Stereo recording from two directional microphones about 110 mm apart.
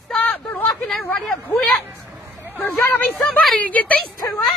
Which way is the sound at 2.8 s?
15° left (ahead or behind).